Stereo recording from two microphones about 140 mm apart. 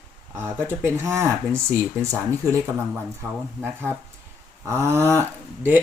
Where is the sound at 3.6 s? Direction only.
15° right (ahead or behind).